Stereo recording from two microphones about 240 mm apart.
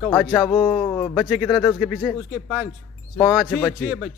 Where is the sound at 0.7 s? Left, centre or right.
Centre.